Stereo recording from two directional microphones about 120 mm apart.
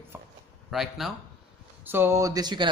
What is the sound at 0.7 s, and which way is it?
Speech, centre (ahead or behind).